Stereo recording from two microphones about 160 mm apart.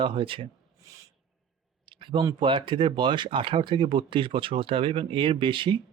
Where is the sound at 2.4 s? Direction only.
30° right (ahead or behind).